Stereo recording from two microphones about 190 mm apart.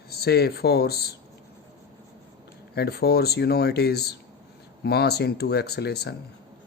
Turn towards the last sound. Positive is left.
turn(degrees=60)  # may be behind; listen again after turning